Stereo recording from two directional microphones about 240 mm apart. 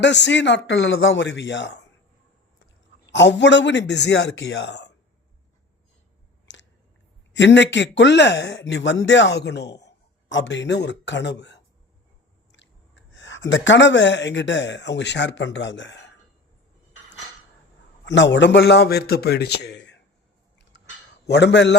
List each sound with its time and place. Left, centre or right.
0.0 s speech: left
3.1 s speech: left
6.5 s chewing: left
7.3 s speech: left
12.5 s a sound: left
13.5 s speech: left
18.0 s speech: left
21.1 s a man's voice: left